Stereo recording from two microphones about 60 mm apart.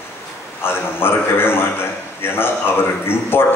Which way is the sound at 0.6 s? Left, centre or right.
Left.